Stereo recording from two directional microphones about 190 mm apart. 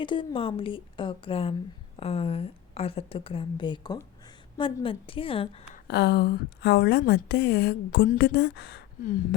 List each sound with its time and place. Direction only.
0.0 s a woman's voice: 25° left (ahead or behind)
5.9 s a woman's voice: 60° left (ahead or behind)